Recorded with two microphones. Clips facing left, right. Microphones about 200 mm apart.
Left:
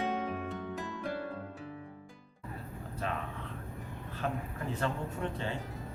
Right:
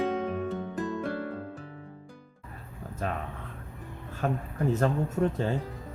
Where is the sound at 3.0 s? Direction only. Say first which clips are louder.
Right 4 dB; 45° right (ahead or behind).